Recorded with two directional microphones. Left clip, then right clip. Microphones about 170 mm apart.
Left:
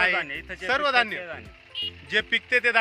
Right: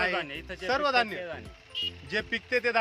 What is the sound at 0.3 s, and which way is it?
Speech, 20° right (ahead or behind).